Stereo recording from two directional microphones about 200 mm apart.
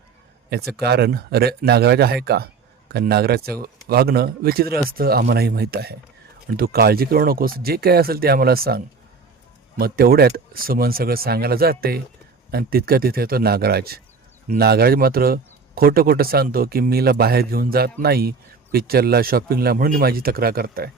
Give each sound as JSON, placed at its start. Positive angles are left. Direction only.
{"t": 0.8, "sound": "speech", "side_deg": -55}